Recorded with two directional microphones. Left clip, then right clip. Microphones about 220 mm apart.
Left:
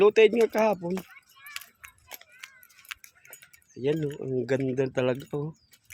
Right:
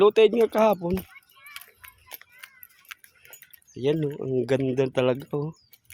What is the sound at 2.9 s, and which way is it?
Tick-tock, 10° right (ahead or behind).